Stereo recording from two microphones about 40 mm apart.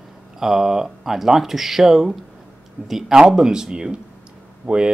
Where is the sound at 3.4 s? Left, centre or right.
Centre.